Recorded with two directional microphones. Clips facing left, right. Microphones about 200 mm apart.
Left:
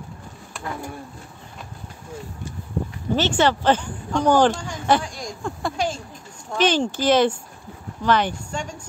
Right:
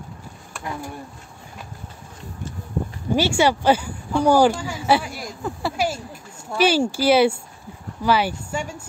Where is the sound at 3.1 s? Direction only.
10° right (ahead or behind).